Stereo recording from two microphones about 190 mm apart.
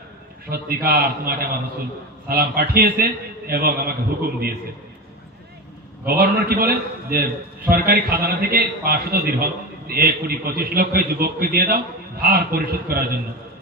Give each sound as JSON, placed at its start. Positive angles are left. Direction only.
{"t": 0.5, "sound": "a man's voice", "side_deg": -55}
{"t": 6.1, "sound": "a man's voice", "side_deg": -55}